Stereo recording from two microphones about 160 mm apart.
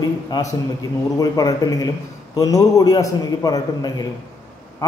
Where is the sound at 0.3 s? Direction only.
20° left (ahead or behind).